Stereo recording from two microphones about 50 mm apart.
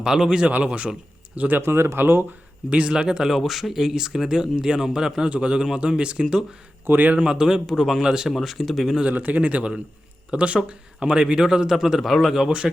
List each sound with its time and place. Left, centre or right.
0.0 s speech: centre
1.4 s a man's voice: right
1.6 s speech: right
2.6 s speech: right
3.3 s speech: centre
6.8 s a man's voice: right
7.2 s speech: centre
8.3 s speech: centre
9.0 s a man's voice: right; by 12.5 s centre